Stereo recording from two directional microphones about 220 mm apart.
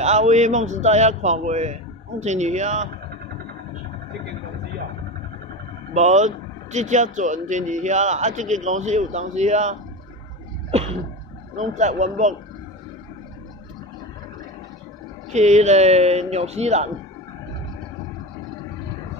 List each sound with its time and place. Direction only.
0.0 s speech: 30° right (ahead or behind)
5.9 s speech: 30° right (ahead or behind)
11.5 s speech: 35° right (ahead or behind)
15.3 s speech: 30° right (ahead or behind)